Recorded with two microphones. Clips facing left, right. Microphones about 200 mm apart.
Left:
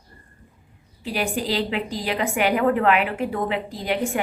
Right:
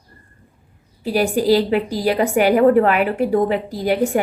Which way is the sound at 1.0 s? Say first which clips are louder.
Right 8 dB; 40° right (ahead or behind).